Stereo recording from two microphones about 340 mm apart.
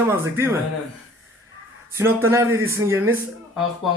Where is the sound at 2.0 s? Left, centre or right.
Centre.